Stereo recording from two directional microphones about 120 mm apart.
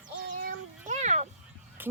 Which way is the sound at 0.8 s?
80° right.